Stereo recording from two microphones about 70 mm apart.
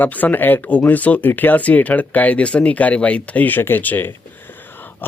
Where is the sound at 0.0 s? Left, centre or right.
Left.